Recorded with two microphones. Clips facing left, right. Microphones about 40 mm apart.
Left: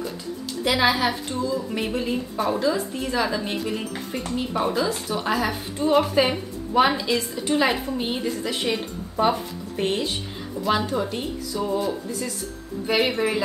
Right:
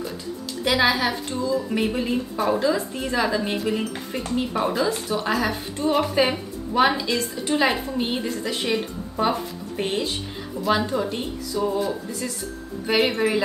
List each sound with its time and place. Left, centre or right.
0.7 s a woman's voice: centre
11.6 s a woman's voice: centre